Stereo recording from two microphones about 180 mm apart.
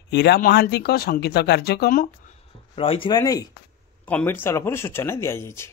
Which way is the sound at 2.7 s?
30° left (ahead or behind).